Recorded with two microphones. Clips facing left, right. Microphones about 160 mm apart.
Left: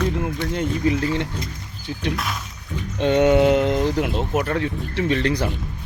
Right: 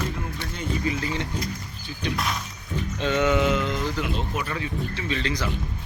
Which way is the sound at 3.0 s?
55° left (ahead or behind).